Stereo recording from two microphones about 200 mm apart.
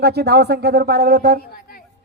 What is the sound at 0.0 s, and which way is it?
Speech, 55° right (ahead or behind).